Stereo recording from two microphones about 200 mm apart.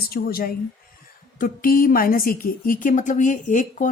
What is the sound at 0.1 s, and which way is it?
Speech, 50° left (ahead or behind).